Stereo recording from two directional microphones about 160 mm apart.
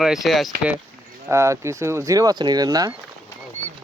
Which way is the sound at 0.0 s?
Centre (ahead or behind).